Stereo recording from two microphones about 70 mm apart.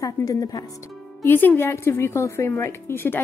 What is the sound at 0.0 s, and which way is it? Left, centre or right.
Speech, left.